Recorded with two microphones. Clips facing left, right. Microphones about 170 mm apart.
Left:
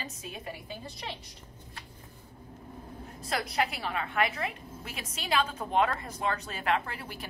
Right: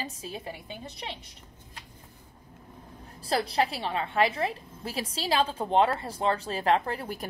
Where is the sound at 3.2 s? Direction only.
30° right (ahead or behind).